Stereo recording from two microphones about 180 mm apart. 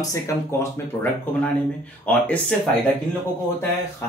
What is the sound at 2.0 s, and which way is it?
Speech, 10° left (ahead or behind).